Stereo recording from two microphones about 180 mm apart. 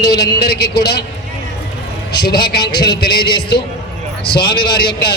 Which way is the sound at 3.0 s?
60° left (ahead or behind).